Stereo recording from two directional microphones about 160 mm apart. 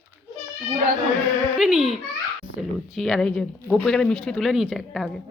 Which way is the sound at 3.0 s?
Centre (ahead or behind).